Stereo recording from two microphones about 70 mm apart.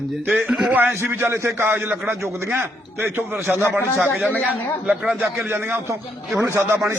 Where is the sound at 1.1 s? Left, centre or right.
Right.